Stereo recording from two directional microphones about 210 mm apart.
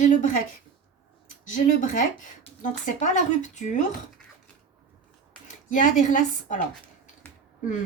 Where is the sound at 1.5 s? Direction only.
40° left (ahead or behind).